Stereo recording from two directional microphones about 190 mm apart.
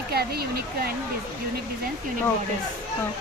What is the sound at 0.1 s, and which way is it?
Speech, 55° right (ahead or behind).